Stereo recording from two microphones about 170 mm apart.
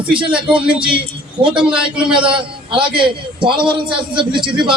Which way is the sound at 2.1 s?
30° right (ahead or behind).